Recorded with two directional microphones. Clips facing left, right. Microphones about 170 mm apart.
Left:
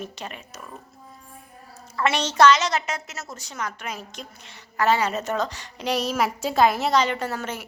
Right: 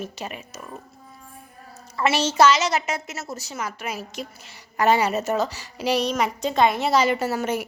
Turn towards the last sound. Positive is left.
turn(degrees=-10)  # may be behind; listen again after turning